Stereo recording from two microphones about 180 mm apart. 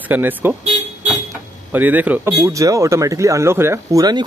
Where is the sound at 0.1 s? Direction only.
10° right (ahead or behind).